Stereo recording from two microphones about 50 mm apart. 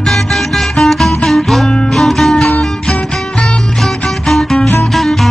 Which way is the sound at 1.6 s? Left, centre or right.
Centre.